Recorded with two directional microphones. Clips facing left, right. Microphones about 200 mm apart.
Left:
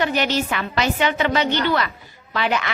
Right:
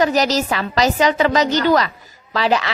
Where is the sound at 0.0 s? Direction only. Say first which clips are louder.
Right 4 dB; 40° right (ahead or behind).